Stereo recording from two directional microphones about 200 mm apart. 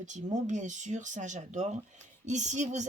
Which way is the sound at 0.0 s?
40° right (ahead or behind).